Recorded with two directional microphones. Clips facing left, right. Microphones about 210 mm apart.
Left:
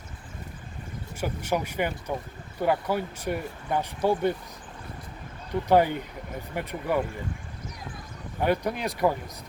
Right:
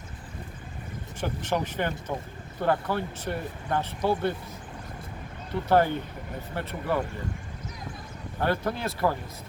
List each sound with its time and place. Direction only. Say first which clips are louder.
1.2 s speech: left 1 dB; 10° left (ahead or behind)
5.6 s speech: left 1 dB; 15° left (ahead or behind)
8.4 s speech: left 2 dB; 15° left (ahead or behind)